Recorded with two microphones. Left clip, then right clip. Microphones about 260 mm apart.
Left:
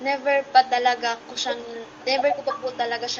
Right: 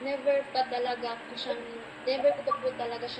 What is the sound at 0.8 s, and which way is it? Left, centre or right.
Speech, left.